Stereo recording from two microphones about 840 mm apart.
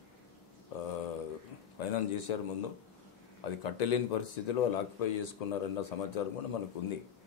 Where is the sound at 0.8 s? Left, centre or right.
Left.